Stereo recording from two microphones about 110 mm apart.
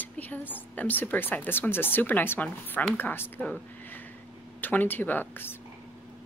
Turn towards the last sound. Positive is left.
turn(degrees=20)  # may be behind; listen again after turning